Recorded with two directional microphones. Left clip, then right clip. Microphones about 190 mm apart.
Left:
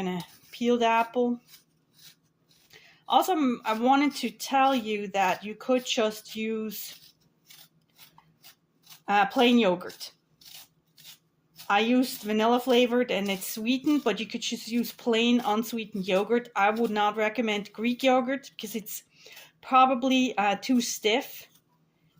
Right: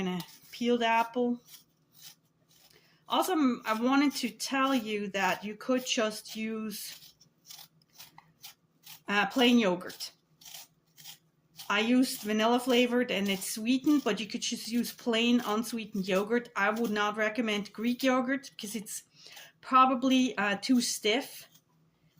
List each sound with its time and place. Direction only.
0.0 s speech: 30° left (ahead or behind)
2.7 s speech: 25° left (ahead or behind)
9.0 s speech: 25° left (ahead or behind)
11.7 s speech: 25° left (ahead or behind)